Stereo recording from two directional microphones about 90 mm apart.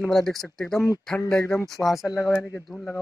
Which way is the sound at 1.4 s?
35° left (ahead or behind).